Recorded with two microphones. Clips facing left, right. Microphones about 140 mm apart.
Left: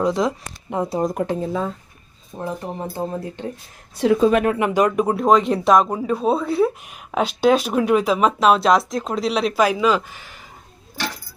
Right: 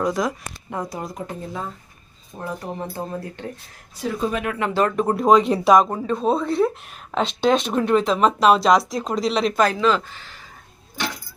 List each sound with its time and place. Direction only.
0.0 s speech: 25° left (ahead or behind)
1.0 s speech: 65° left (ahead or behind)
2.4 s speech: 20° left (ahead or behind)
3.9 s speech: 85° left
4.6 s speech: 15° left (ahead or behind)
5.1 s speech: centre (ahead or behind)